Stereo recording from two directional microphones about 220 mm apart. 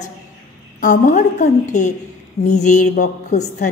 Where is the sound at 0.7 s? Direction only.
35° left (ahead or behind).